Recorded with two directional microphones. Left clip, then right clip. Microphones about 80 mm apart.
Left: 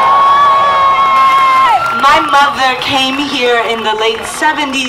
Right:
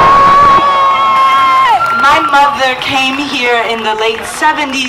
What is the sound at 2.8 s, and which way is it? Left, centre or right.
A woman's voice, centre.